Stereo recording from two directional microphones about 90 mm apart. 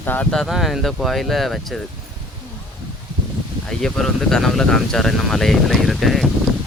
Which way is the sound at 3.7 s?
5° left (ahead or behind).